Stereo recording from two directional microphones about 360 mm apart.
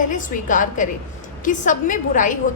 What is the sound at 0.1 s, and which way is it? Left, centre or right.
A woman's voice, left.